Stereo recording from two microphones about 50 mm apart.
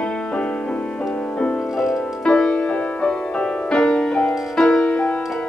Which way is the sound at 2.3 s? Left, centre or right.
Centre.